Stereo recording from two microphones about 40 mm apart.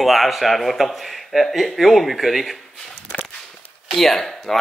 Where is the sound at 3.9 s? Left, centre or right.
Centre.